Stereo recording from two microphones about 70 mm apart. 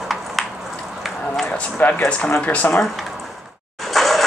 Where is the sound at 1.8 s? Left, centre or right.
Left.